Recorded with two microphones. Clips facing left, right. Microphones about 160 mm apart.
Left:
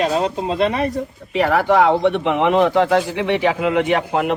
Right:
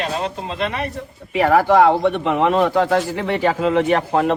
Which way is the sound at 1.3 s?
10° right (ahead or behind).